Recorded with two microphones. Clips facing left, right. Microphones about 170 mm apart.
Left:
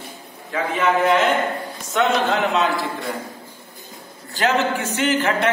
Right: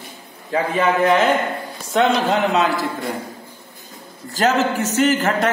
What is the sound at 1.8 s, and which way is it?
Speech, 30° right (ahead or behind).